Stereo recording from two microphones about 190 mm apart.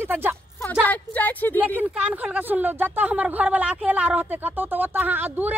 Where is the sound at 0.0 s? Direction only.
10° right (ahead or behind).